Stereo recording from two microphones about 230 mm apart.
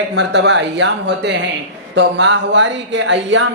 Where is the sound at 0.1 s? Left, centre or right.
Right.